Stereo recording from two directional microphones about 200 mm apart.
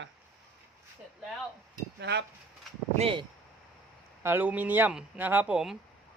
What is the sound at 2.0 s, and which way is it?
Speech, 60° right (ahead or behind).